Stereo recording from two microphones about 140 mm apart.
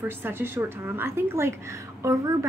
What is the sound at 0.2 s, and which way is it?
A woman's voice, 15° right (ahead or behind).